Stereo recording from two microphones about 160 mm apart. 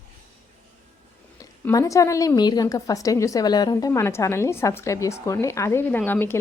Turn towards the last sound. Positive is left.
turn(degrees=10)  # may be behind; listen again after turning